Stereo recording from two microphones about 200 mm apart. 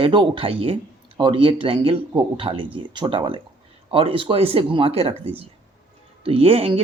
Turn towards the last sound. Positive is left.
turn(degrees=-30)  # may be behind; listen again after turning